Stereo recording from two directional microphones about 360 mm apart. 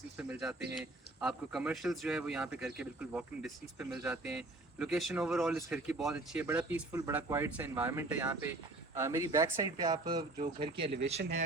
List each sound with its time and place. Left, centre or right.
0.2 s speech: centre
10.7 s speech: right